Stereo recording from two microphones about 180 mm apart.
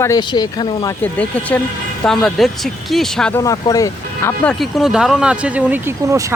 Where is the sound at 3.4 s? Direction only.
20° left (ahead or behind).